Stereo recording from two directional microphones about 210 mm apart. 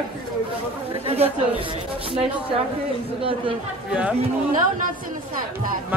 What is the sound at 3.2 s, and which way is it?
Speech, 25° right (ahead or behind).